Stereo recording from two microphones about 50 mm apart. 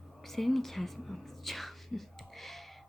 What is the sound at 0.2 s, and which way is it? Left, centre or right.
Whispering, centre.